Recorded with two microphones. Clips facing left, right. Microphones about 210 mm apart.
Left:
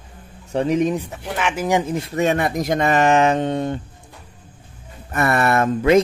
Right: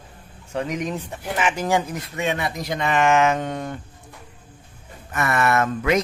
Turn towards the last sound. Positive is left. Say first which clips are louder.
# left 5 dB
turn(degrees=30)  # may be behind; listen again after turning